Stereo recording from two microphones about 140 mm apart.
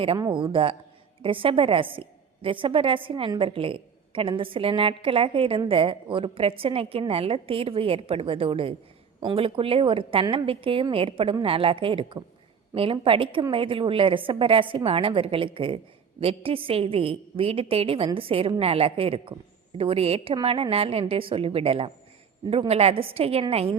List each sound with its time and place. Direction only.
0.0 s a woman's voice: 40° right (ahead or behind)